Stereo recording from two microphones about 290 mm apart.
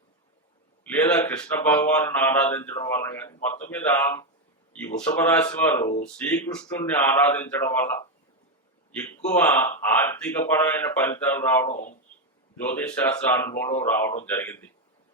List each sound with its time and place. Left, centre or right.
0.9 s a man's voice: centre
11.7 s speech: left
12.6 s speech: centre